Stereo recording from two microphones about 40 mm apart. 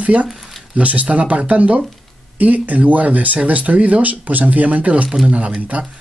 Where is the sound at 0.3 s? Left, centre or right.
Centre.